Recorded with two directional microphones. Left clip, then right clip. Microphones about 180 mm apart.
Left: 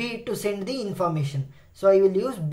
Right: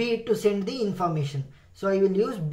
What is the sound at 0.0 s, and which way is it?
Speech, 40° left (ahead or behind).